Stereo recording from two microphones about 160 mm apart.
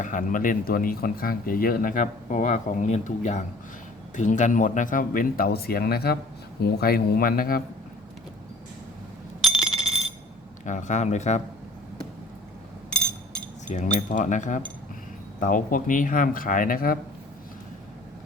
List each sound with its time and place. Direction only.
0.0 s a man's voice: 55° left (ahead or behind)
9.4 s a sound: 5° right (ahead or behind)
10.7 s speech: 50° left (ahead or behind)
13.7 s speech: 55° left (ahead or behind)